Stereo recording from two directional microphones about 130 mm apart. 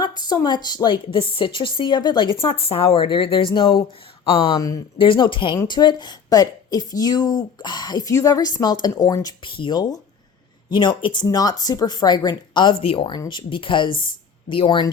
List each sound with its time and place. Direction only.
0.0 s a woman's voice: 35° left (ahead or behind)